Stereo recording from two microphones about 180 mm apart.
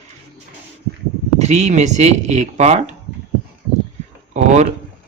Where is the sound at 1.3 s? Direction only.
40° right (ahead or behind).